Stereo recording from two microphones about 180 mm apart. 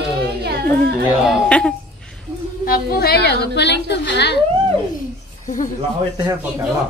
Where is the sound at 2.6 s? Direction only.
55° left (ahead or behind).